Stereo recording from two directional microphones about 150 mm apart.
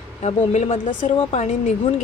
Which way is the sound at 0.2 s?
45° left (ahead or behind).